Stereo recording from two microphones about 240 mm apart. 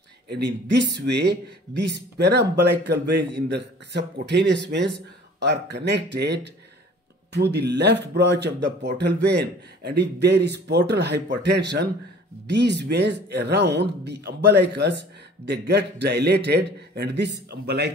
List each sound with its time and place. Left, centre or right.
0.3 s a man's voice: right